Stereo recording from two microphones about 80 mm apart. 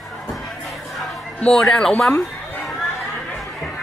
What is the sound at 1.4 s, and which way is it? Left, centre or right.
Speech, centre.